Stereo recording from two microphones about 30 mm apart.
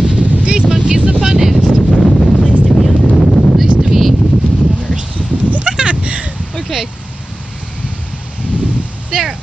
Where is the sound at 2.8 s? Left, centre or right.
Centre.